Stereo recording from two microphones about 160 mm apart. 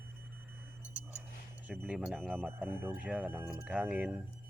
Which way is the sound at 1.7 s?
Centre (ahead or behind).